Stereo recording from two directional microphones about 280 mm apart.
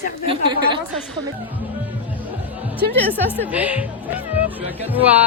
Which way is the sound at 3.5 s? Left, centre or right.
Centre.